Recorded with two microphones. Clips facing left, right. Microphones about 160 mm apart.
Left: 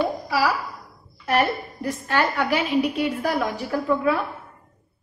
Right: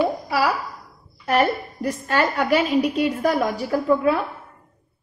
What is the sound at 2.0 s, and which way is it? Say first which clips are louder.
A woman's voice: right 2 dB; 40° right (ahead or behind).